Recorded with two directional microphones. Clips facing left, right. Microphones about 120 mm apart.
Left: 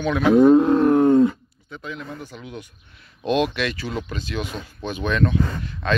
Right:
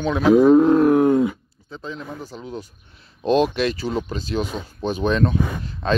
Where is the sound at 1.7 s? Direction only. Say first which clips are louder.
Right 1 dB; 30° right (ahead or behind).